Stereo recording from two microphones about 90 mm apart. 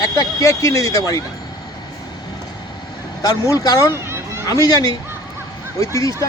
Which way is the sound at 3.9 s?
30° right (ahead or behind).